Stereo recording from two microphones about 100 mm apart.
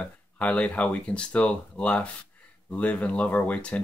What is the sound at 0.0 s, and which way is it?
Speech, 15° left (ahead or behind).